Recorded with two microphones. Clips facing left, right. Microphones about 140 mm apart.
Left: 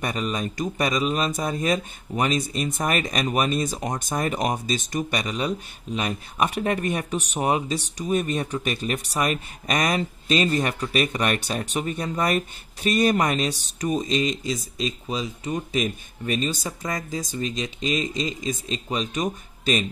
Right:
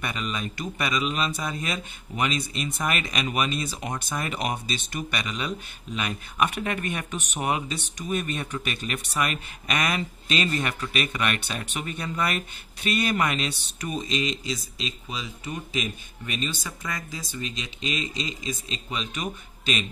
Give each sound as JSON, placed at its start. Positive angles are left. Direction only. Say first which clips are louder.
{"t": 0.0, "sound": "speech", "louder": "left 4 dB", "side_deg": 40}